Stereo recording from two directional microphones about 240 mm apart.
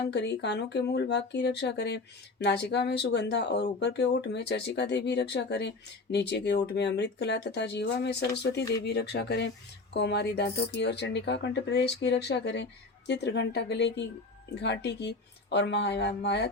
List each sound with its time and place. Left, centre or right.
0.1 s speech: left